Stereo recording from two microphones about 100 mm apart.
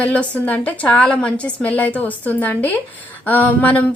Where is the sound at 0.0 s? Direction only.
15° left (ahead or behind).